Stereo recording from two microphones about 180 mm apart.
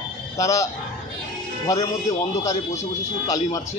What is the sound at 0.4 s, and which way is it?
Speech, 15° left (ahead or behind).